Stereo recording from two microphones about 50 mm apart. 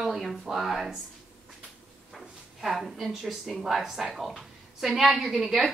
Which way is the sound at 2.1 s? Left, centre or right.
Centre.